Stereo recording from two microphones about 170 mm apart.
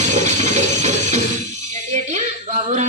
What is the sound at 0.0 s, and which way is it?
Music, 45° right (ahead or behind).